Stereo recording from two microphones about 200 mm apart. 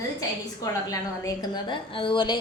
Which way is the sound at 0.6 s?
15° left (ahead or behind).